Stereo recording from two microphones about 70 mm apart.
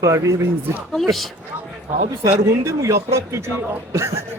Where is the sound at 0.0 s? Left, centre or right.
Right.